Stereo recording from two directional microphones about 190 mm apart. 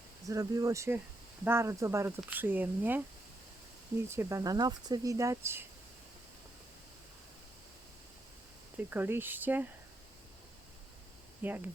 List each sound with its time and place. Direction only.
0.3 s speech: 15° right (ahead or behind)
4.1 s speech: 15° right (ahead or behind)
8.9 s speech: 10° right (ahead or behind)
11.4 s speech: 10° right (ahead or behind)